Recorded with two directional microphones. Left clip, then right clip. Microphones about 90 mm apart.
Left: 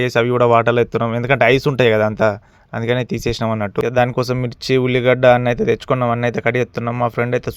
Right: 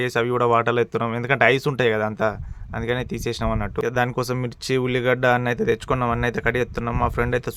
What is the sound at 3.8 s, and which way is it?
Speech, 35° left (ahead or behind).